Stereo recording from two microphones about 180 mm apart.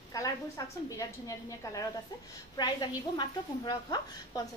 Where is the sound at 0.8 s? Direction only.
20° left (ahead or behind).